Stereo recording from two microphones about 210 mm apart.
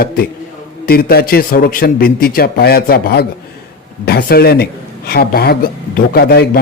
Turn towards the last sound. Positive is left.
turn(degrees=45)  # may be behind; listen again after turning